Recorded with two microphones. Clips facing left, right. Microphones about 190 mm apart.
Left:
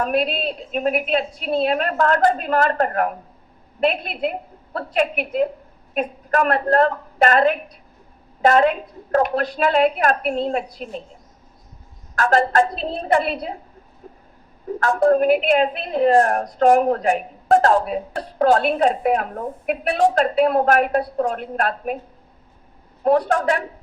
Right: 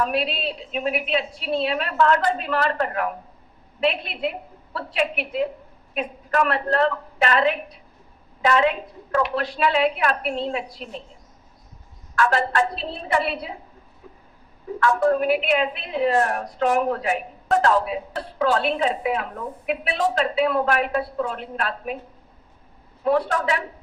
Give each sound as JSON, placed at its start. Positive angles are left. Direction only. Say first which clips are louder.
{"t": 0.0, "sound": "a woman's voice", "louder": "left 3 dB", "side_deg": 50}
{"t": 12.1, "sound": "a woman's voice", "louder": "left 4 dB", "side_deg": 40}
{"t": 14.0, "sound": "a sound", "louder": "left 4 dB", "side_deg": 45}
{"t": 14.8, "sound": "a woman's voice", "louder": "left 3 dB", "side_deg": 40}
{"t": 23.0, "sound": "a woman's voice", "louder": "left 4 dB", "side_deg": 45}